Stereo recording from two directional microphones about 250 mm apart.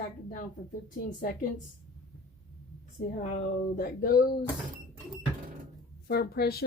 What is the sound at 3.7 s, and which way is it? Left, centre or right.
Speech, left.